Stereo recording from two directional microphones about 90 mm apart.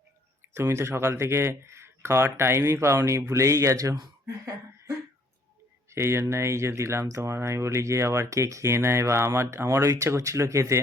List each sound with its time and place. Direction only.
0.5 s speech: 30° right (ahead or behind)
5.9 s speech: 30° right (ahead or behind)